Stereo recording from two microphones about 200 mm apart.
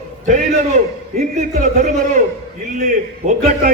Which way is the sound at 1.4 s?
40° right (ahead or behind).